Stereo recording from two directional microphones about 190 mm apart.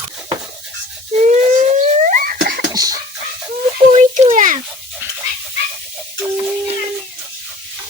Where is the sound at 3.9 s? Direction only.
40° right (ahead or behind).